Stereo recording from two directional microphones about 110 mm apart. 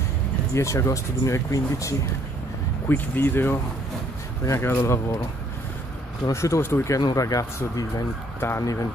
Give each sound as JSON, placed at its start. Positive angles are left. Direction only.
{"t": 0.6, "sound": "speech", "side_deg": 25}
{"t": 6.2, "sound": "speech", "side_deg": 25}